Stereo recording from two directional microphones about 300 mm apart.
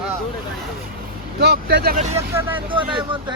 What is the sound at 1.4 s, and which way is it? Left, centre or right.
Speech, right.